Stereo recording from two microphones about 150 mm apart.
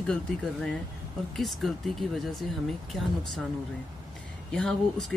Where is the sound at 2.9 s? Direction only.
Centre (ahead or behind).